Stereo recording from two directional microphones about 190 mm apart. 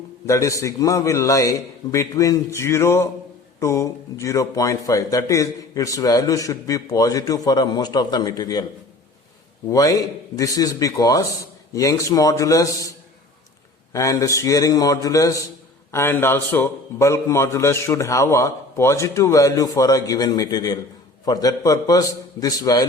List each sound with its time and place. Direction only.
0.3 s a man's voice: 15° left (ahead or behind)
9.6 s a man's voice: 15° left (ahead or behind)
13.9 s a man's voice: 15° left (ahead or behind)